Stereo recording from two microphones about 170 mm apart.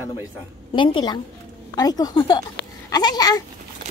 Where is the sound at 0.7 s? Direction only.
30° left (ahead or behind).